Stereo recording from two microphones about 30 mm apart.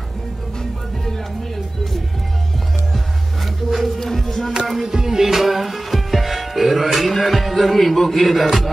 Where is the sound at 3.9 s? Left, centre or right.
Centre.